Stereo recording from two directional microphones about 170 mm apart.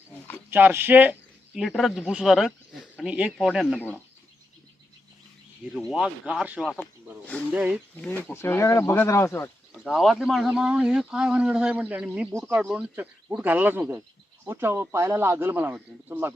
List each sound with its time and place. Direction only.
0.5 s a man's voice: 10° right (ahead or behind)
3.8 s speech: 10° left (ahead or behind)
5.7 s a man's voice: centre (ahead or behind)
8.0 s speech: 10° left (ahead or behind)
9.8 s a man's voice: centre (ahead or behind)